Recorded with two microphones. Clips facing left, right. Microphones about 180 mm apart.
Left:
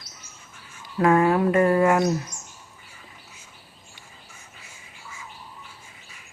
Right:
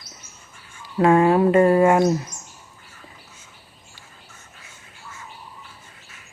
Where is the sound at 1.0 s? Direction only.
25° right (ahead or behind).